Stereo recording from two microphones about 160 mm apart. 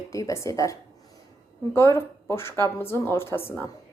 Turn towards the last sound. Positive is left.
turn(degrees=15)  # may be behind; listen again after turning